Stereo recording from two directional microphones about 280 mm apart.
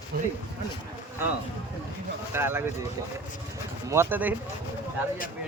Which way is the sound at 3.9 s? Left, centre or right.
Centre.